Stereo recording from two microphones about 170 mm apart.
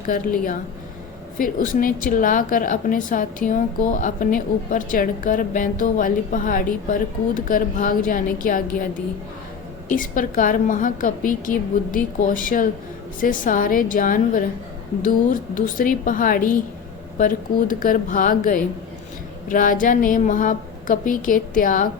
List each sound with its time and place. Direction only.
0.0 s a woman's voice: 50° left (ahead or behind)
9.9 s a woman's voice: 50° left (ahead or behind)